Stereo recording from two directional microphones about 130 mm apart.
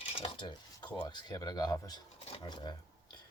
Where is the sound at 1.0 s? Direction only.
35° left (ahead or behind).